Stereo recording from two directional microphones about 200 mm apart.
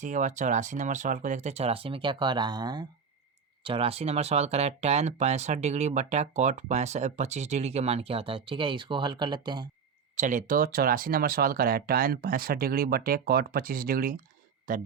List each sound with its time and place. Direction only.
0.0 s speech: 40° right (ahead or behind); by 9.6 s 20° right (ahead or behind)
10.2 s speech: 40° right (ahead or behind)